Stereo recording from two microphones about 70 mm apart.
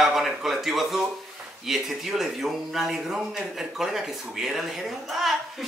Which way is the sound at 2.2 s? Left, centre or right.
Centre.